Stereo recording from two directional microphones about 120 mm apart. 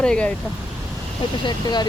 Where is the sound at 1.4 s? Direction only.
35° left (ahead or behind).